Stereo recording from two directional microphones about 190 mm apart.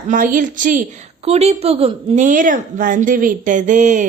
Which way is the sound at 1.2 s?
35° right (ahead or behind).